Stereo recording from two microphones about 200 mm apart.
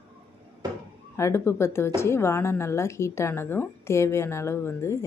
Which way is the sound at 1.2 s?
15° left (ahead or behind).